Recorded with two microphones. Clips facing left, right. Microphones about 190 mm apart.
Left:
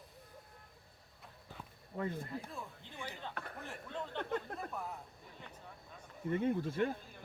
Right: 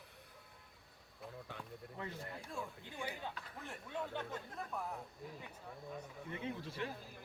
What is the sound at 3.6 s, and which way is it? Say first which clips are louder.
Speech: right 2 dB; 5° right (ahead or behind).